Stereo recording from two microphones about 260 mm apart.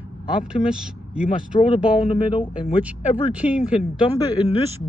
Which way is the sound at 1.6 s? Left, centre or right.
Left.